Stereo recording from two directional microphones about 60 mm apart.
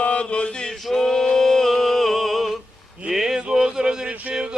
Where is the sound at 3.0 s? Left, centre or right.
Centre.